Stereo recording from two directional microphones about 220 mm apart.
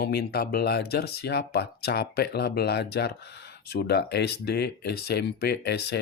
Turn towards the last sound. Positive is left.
turn(degrees=50)  # may be behind; listen again after turning